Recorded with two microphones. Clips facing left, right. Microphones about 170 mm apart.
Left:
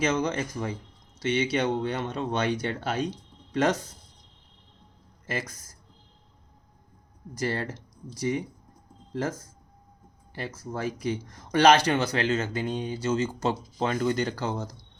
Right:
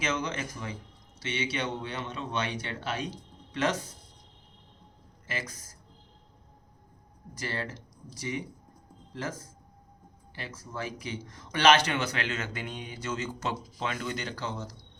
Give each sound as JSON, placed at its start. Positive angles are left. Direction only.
{"t": 0.0, "sound": "speech", "side_deg": 40}
{"t": 5.2, "sound": "speech", "side_deg": 40}
{"t": 7.3, "sound": "speech", "side_deg": 40}
{"t": 10.3, "sound": "speech", "side_deg": 40}